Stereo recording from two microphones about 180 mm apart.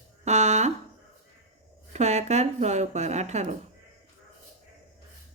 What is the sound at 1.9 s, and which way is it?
A woman's voice, 40° right (ahead or behind).